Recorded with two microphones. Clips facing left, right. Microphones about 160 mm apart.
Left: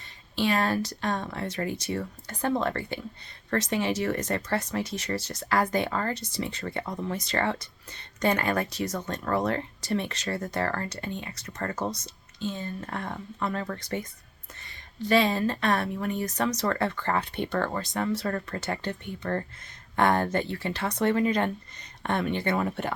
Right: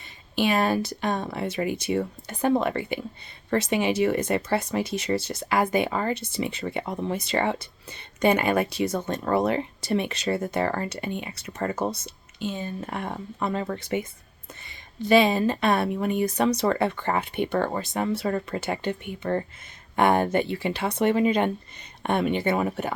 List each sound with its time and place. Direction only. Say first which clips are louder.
0.3 s speech: right 3 dB; 10° right (ahead or behind)
6.9 s speech: right 3 dB; 25° right (ahead or behind)
7.3 s speech: right 3 dB; 15° right (ahead or behind)